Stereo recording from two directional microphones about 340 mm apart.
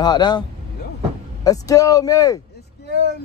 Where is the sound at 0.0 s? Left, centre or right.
Centre.